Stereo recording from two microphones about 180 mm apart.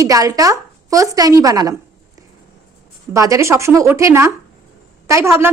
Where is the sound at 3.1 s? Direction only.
15° right (ahead or behind).